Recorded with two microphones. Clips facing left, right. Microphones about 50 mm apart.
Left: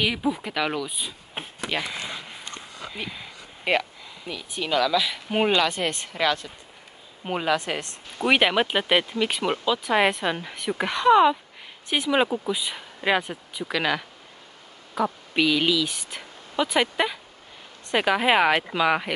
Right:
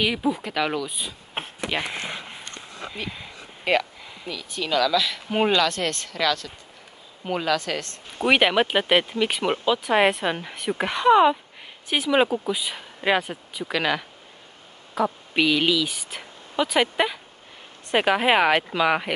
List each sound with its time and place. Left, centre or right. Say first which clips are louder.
0.0 s speech: right 1 dB; centre
2.0 s a sound: right 2 dB; right
2.9 s speech: even; centre
3.7 s a woman's voice: right 2 dB; centre
8.3 s speech: right 1 dB; centre